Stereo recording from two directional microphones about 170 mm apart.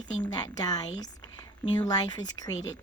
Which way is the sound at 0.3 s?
20° left (ahead or behind).